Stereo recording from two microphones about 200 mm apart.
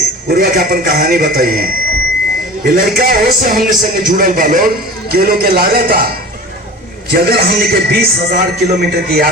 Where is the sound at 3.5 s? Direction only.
45° right (ahead or behind).